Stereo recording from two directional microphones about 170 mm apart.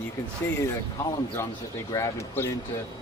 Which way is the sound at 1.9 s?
20° left (ahead or behind).